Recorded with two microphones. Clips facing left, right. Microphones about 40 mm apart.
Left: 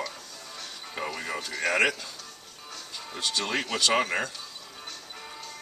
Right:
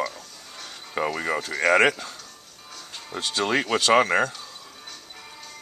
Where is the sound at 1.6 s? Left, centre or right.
Right.